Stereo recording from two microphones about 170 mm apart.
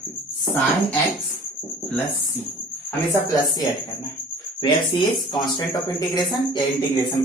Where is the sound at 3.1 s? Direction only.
20° left (ahead or behind).